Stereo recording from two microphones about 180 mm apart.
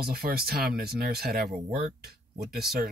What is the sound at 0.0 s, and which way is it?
Speech, 55° right (ahead or behind).